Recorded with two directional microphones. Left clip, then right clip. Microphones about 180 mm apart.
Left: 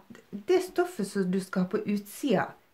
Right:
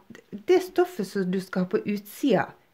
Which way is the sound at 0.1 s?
45° right (ahead or behind).